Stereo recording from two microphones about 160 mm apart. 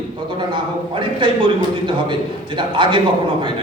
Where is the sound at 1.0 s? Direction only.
30° right (ahead or behind).